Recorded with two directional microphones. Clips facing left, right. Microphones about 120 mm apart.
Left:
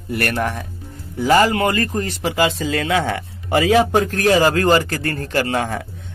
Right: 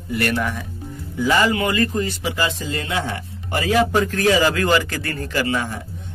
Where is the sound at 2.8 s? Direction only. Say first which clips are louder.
Left 5 dB; 90° left.